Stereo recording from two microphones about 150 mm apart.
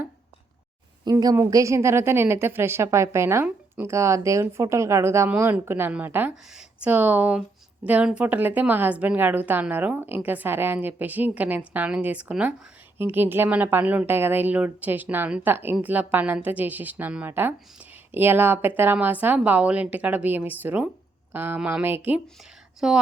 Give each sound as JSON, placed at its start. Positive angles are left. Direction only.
{"t": 1.0, "sound": "a woman's voice", "side_deg": -25}